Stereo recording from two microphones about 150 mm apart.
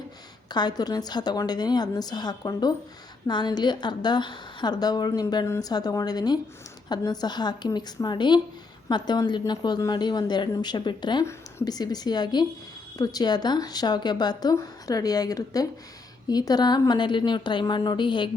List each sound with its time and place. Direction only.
0.5 s a woman's voice: 30° left (ahead or behind)